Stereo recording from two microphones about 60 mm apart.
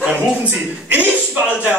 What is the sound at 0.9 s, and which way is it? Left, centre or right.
Speech, right.